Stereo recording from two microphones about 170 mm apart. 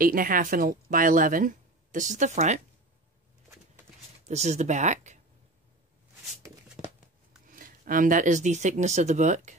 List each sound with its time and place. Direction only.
0.0 s speech: 55° right (ahead or behind)
4.3 s speech: 40° right (ahead or behind)
7.4 s speech: 55° right (ahead or behind)